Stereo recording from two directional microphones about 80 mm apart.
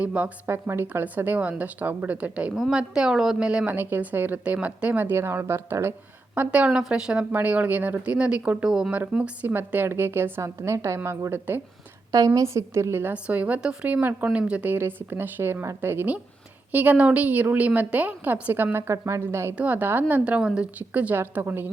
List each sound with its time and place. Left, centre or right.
0.0 s speech: centre
0.4 s a woman's voice: right
2.6 s speech: centre
3.8 s a woman's voice: right
6.3 s a woman's voice: centre
12.1 s a woman's voice: right
13.1 s a woman's voice: centre; by 19.5 s right
19.5 s a woman's voice: right